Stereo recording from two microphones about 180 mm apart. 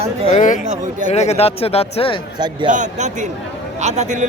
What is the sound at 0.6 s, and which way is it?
Speech, 40° right (ahead or behind).